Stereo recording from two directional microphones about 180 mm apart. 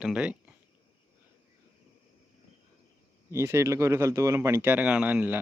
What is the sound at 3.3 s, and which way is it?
Speech, 15° right (ahead or behind).